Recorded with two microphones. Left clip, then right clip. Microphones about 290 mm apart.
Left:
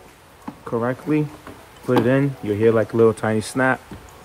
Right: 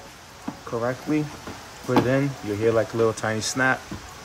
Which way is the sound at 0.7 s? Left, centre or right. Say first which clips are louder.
Left 4 dB; left.